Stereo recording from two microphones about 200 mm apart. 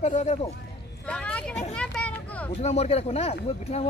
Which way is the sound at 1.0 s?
5° left (ahead or behind).